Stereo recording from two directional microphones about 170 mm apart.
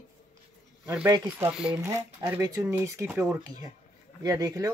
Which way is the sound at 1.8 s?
15° right (ahead or behind).